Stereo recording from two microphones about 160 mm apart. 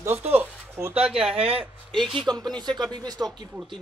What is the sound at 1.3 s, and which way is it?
Speech, 35° right (ahead or behind).